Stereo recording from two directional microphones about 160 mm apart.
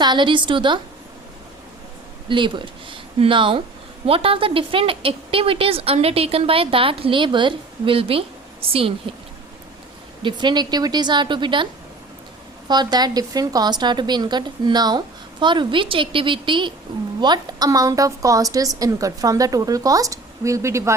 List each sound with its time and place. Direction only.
0.0 s a woman's voice: 30° right (ahead or behind)
2.3 s a woman's voice: 30° right (ahead or behind)
10.2 s a woman's voice: 30° right (ahead or behind)